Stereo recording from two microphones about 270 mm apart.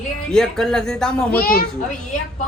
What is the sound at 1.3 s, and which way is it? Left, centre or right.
Speech, left.